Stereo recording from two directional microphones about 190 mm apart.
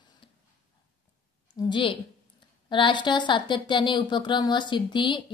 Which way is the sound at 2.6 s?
25° left (ahead or behind).